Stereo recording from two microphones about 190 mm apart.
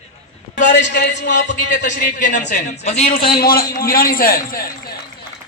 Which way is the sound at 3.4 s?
50° left (ahead or behind).